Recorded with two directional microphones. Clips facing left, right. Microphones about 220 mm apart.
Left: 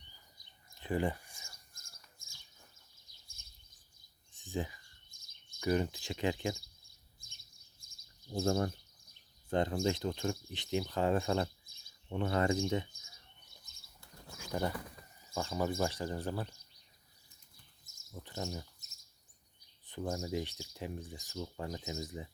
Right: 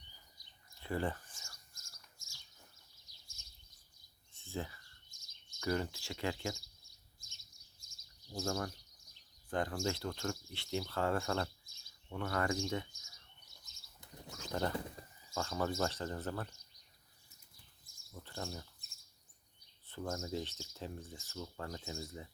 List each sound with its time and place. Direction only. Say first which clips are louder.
0.8 s a sound: left 4 dB; 15° left (ahead or behind)
1.7 s bird: left 2 dB; 55° left (ahead or behind)
3.1 s a sound: even; 55° left (ahead or behind)
4.3 s a sound: left 4 dB; 15° left (ahead or behind)
5.1 s bird vocalization: even; 55° left (ahead or behind)
5.5 s speech: left 4 dB; 15° left (ahead or behind)
6.8 s bird: left 2 dB; 55° left (ahead or behind)
8.4 s speech: left 6 dB; 30° left (ahead or behind)
13.7 s bird flight: left 1 dB; 55° left (ahead or behind)
14.3 s bird flight: left 1 dB; 10° left (ahead or behind)
15.0 s bird: right 4 dB; 30° right (ahead or behind)
15.4 s speech: left 2 dB; 15° left (ahead or behind)
18.1 s speech: left 3 dB; 15° left (ahead or behind)
19.9 s speech: left 3 dB; 15° left (ahead or behind)